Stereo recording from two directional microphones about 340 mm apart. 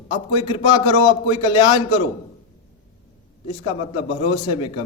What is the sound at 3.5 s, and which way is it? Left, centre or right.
A man's voice, centre.